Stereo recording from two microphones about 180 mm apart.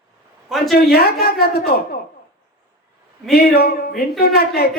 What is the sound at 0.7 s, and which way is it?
Speech, 60° left (ahead or behind).